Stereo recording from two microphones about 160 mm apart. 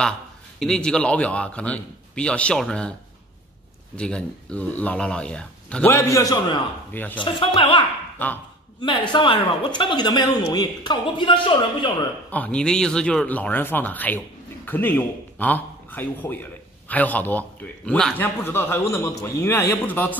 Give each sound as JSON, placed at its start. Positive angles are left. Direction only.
{"t": 0.6, "sound": "speech", "side_deg": 5}
{"t": 3.9, "sound": "speech", "side_deg": 5}
{"t": 6.9, "sound": "speech", "side_deg": 10}
{"t": 7.2, "sound": "speech", "side_deg": 35}
{"t": 8.2, "sound": "speech", "side_deg": 10}
{"t": 8.8, "sound": "speech", "side_deg": 30}
{"t": 12.3, "sound": "speech", "side_deg": 10}